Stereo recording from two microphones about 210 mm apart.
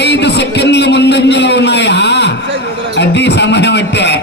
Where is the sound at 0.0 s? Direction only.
55° left (ahead or behind).